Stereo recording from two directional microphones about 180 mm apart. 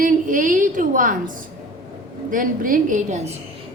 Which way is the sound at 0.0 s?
45° right (ahead or behind).